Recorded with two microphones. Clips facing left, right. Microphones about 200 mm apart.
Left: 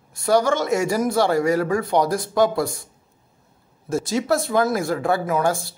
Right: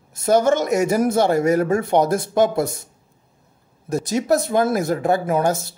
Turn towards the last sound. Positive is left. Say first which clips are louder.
# right 2 dB
turn(degrees=-20)  # may be behind; listen again after turning